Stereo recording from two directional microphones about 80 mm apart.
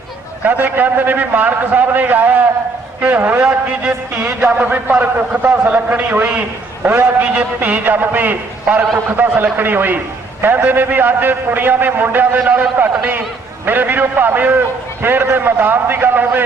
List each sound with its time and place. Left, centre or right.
0.4 s a man's voice: right